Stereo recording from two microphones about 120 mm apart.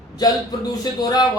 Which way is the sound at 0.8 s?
35° left (ahead or behind).